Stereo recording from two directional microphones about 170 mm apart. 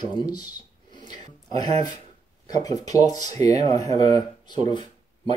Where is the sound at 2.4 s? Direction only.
20° left (ahead or behind).